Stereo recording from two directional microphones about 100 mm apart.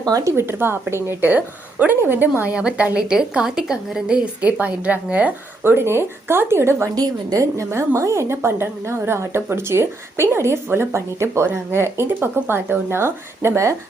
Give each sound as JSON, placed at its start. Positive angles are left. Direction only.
{"t": 0.0, "sound": "a woman's voice", "side_deg": -35}